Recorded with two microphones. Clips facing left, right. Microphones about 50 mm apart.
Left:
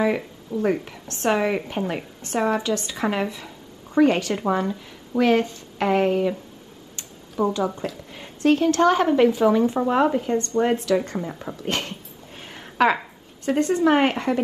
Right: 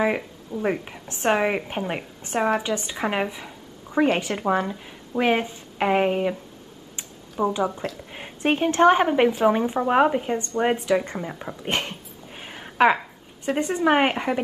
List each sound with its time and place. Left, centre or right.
0.5 s speech: right
0.8 s a woman's voice: right
7.4 s speech: centre
8.1 s a woman's voice: right
11.6 s a sound: centre
12.9 s a sound: centre
13.6 s speech: centre